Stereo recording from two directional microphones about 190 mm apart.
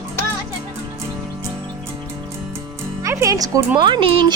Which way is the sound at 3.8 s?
25° right (ahead or behind).